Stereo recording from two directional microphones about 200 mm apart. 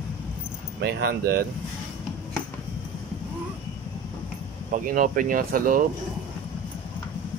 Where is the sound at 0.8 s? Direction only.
50° right (ahead or behind).